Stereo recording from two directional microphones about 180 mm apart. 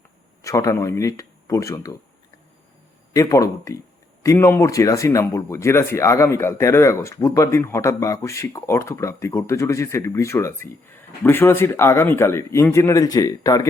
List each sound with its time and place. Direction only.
0.4 s speech: 15° left (ahead or behind)
3.1 s a man's voice: 20° left (ahead or behind)